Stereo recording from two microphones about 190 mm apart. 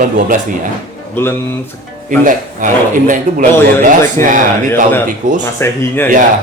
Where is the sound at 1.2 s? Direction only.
10° left (ahead or behind).